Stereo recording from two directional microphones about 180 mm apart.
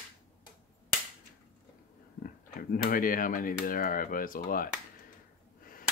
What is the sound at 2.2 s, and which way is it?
Speech, 50° left (ahead or behind).